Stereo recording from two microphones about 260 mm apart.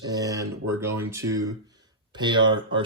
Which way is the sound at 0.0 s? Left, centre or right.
Centre.